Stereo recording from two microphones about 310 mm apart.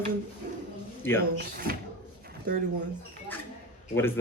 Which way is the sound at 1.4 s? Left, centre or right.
Right.